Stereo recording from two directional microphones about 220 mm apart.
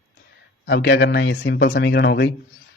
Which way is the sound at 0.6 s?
55° left (ahead or behind).